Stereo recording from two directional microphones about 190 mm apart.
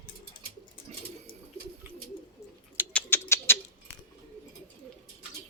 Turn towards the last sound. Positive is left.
turn(degrees=15)  # may be behind; listen again after turning